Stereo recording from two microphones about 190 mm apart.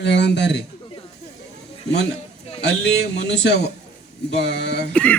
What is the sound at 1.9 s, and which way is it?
Speech, 60° left (ahead or behind).